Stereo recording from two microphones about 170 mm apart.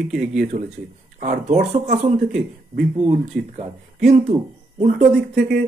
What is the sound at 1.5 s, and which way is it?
Speech, 40° right (ahead or behind).